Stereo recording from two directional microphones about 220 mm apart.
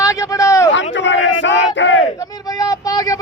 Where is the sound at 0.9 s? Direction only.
55° left (ahead or behind).